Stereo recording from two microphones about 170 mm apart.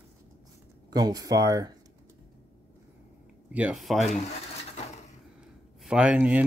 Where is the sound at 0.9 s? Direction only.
20° right (ahead or behind).